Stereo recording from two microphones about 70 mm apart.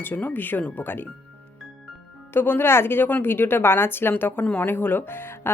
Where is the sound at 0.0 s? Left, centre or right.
Left.